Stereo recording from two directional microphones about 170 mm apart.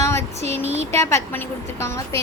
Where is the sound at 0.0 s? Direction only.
15° left (ahead or behind).